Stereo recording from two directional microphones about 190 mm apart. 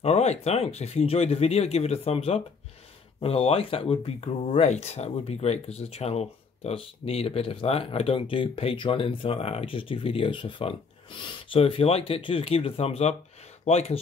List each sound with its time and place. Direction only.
0.0 s speech: 35° left (ahead or behind)